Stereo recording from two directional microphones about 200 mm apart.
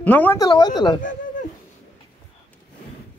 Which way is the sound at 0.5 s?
20° left (ahead or behind).